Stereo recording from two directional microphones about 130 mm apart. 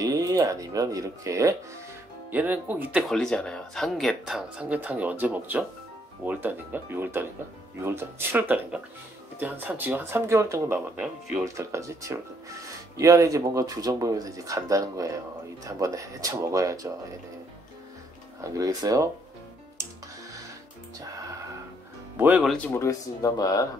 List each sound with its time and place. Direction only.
0.0 s speech: 25° right (ahead or behind)
2.3 s speech: 10° right (ahead or behind)
3.0 s speech: 5° left (ahead or behind); by 16.9 s 25° right (ahead or behind)
18.4 s speech: 25° right (ahead or behind)
22.8 s speech: 25° left (ahead or behind)